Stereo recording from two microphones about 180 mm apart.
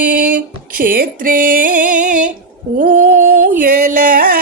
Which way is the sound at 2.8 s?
50° right (ahead or behind).